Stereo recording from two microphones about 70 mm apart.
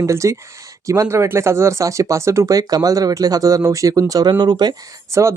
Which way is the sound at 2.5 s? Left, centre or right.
Right.